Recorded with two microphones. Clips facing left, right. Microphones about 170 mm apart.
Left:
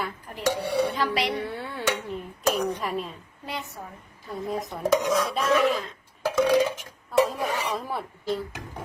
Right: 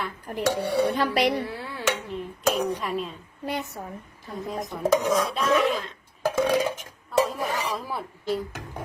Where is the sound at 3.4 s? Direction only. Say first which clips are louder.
Right 5 dB; 50° right (ahead or behind).